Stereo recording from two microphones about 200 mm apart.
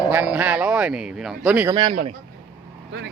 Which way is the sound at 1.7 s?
25° right (ahead or behind).